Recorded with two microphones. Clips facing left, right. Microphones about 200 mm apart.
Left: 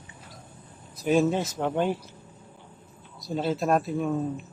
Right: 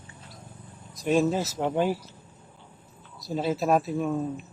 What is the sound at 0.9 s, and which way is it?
A man's voice, centre (ahead or behind).